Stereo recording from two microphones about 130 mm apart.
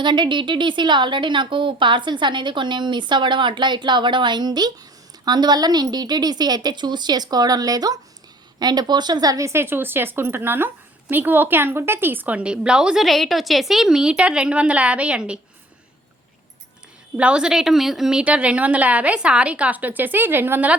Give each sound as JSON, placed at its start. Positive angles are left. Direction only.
{"t": 0.0, "sound": "a woman's voice", "side_deg": -35}
{"t": 17.2, "sound": "a woman's voice", "side_deg": -10}